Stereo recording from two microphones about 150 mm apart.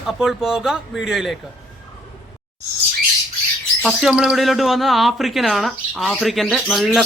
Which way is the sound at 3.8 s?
Centre (ahead or behind).